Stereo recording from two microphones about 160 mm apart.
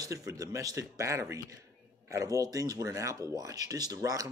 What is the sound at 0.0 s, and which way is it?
Speech, 20° right (ahead or behind).